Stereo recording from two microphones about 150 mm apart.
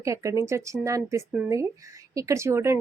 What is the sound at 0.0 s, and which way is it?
Speech, 20° right (ahead or behind).